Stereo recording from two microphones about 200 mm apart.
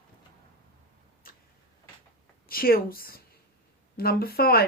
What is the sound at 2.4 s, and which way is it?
A woman's voice, 45° left (ahead or behind).